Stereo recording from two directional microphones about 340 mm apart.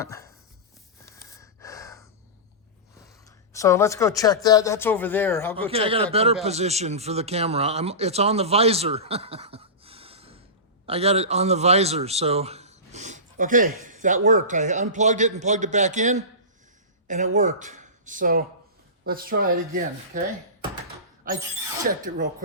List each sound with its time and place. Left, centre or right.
0.0 s chopping: centre
1.1 s gasp: centre
3.0 s a woman's voice: centre
5.7 s a man's voice: centre
17.3 s a man's voice: right
21.8 s a man's voice: right